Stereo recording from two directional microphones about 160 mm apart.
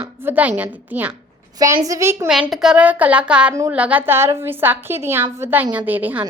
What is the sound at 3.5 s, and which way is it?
A woman's voice, 20° right (ahead or behind).